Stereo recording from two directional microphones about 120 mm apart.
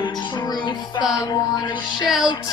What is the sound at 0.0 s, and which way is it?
Music, 40° left (ahead or behind).